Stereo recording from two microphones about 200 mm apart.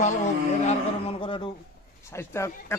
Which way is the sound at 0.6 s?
25° left (ahead or behind).